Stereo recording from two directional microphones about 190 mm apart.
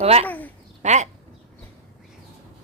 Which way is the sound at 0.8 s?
40° right (ahead or behind).